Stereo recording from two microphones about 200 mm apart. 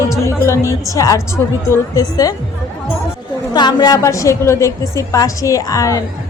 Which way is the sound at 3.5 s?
20° left (ahead or behind).